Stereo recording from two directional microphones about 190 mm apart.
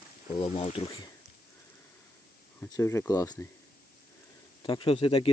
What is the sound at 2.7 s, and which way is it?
Speech, 15° left (ahead or behind).